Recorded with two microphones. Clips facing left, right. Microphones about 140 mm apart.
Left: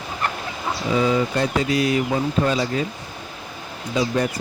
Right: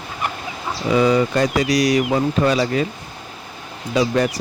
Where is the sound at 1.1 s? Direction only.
90° right.